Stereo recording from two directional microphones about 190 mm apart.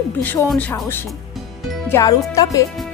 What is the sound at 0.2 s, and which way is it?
Speech, 10° left (ahead or behind).